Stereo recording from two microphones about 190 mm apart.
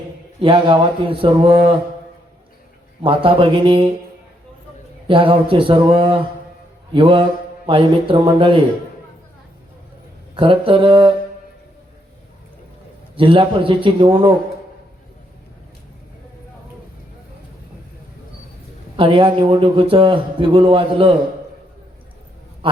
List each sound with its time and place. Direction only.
0.4 s speech: 25° right (ahead or behind)
3.0 s speech: 25° right (ahead or behind)
5.0 s speech: 25° right (ahead or behind)
10.3 s speech: 25° right (ahead or behind)
13.1 s speech: 25° right (ahead or behind)
18.9 s speech: 25° right (ahead or behind)
22.6 s a sound: 25° right (ahead or behind)